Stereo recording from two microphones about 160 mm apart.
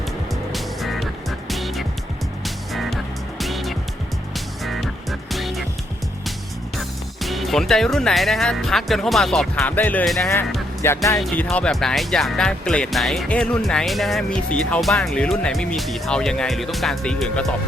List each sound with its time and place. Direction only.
0.5 s music: centre (ahead or behind)
6.7 s speech: centre (ahead or behind)
10.8 s speech: 20° left (ahead or behind)
11.3 s speech: 5° left (ahead or behind)